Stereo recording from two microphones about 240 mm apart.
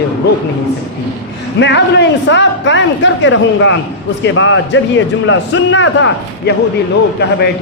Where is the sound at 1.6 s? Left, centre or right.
Left.